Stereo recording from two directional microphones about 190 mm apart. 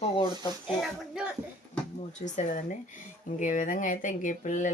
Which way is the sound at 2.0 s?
40° left (ahead or behind).